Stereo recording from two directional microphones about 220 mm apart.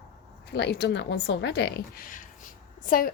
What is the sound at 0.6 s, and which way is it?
A woman's voice, 50° left (ahead or behind).